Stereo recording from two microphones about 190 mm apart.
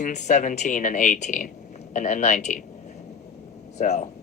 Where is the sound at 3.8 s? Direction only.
40° left (ahead or behind).